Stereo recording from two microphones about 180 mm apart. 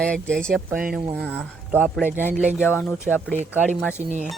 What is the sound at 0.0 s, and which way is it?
Speech, 5° left (ahead or behind).